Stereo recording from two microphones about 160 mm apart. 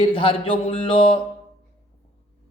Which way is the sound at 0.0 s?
30° left (ahead or behind).